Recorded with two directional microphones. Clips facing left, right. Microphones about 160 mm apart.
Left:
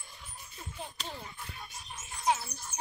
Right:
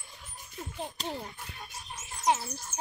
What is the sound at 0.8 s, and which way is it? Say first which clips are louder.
Speech: right 6 dB; 40° right (ahead or behind).